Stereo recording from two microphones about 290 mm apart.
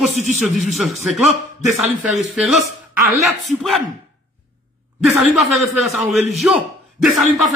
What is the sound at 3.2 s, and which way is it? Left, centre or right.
Speech, centre.